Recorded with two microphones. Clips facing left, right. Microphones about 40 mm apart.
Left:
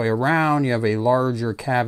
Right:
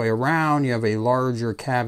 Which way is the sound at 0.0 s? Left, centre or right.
Left.